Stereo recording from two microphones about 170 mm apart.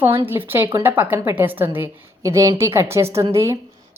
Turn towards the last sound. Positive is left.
turn(degrees=-15)  # may be behind; listen again after turning